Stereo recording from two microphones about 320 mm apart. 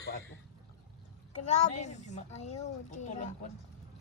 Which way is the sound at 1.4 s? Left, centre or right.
Left.